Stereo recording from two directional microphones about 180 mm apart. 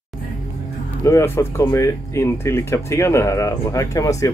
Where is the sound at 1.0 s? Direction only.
15° left (ahead or behind).